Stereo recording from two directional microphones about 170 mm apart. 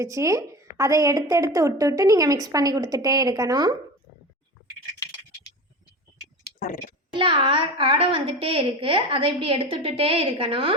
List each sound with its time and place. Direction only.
0.0 s a woman's voice: 20° right (ahead or behind)
7.1 s a child's voice: 30° right (ahead or behind)